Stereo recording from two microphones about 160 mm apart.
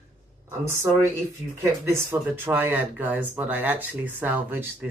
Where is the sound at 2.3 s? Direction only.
15° right (ahead or behind).